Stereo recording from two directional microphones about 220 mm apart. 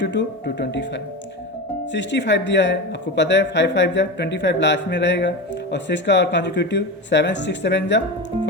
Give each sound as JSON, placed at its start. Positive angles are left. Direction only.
{"t": 0.0, "sound": "speech", "side_deg": 55}